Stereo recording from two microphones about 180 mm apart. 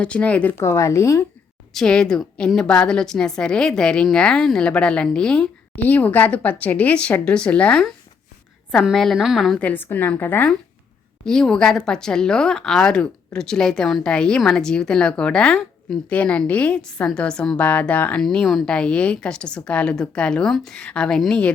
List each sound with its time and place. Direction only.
0.0 s a woman's voice: 5° left (ahead or behind)
1.7 s a woman's voice: 5° left (ahead or behind)